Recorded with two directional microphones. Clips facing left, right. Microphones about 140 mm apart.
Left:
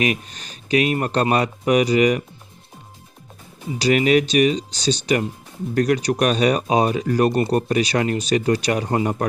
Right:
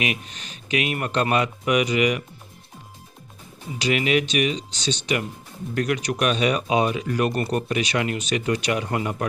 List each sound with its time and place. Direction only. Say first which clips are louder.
0.0 s speech: left 5 dB; 35° left (ahead or behind)
3.8 s speech: left 5 dB; 40° left (ahead or behind)